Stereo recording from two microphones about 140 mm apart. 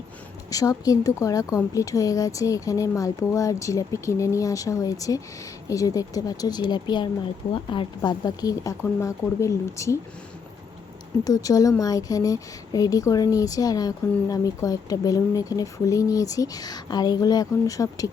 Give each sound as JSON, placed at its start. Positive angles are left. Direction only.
{"t": 0.5, "sound": "speech", "side_deg": 25}
{"t": 11.2, "sound": "speech", "side_deg": 25}